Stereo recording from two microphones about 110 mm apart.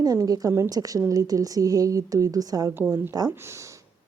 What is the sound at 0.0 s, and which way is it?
A woman's voice, 35° right (ahead or behind).